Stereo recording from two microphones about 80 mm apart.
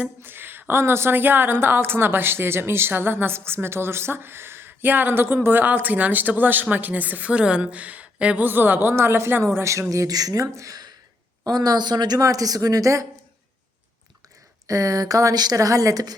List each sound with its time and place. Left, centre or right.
0.2 s a woman's voice: right
14.7 s a woman's voice: right